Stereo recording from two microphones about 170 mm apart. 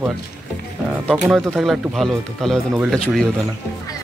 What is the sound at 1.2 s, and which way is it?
Speech, centre (ahead or behind).